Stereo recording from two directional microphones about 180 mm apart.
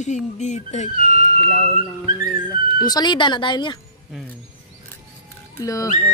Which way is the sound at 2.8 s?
25° left (ahead or behind).